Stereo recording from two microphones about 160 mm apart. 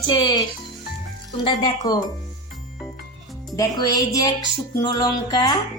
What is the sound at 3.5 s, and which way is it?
Speech, 25° left (ahead or behind).